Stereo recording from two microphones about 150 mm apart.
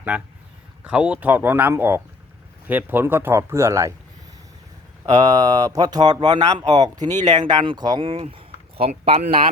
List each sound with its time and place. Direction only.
0.9 s speech: 10° right (ahead or behind)
5.2 s speech: 25° right (ahead or behind)